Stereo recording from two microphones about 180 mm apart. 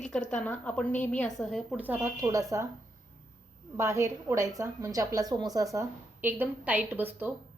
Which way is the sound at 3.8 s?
15° right (ahead or behind).